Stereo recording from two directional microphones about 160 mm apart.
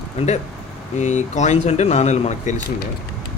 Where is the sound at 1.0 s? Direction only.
50° left (ahead or behind).